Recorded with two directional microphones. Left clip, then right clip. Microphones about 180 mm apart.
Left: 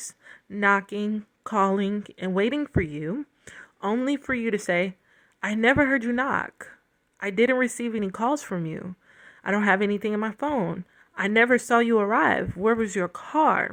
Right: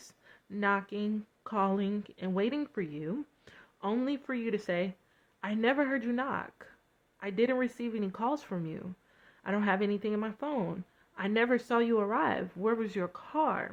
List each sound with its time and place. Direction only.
0.3 s speech: 30° left (ahead or behind)